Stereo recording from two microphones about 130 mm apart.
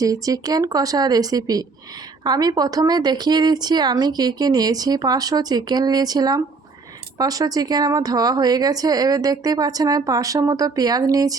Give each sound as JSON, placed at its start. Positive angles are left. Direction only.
{"t": 0.0, "sound": "a woman's voice", "side_deg": -25}